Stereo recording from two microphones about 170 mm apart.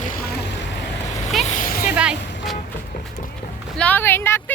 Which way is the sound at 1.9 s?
5° right (ahead or behind).